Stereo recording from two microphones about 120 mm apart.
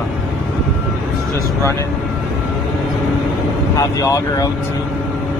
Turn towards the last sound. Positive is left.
turn(degrees=30)  # may be behind; listen again after turning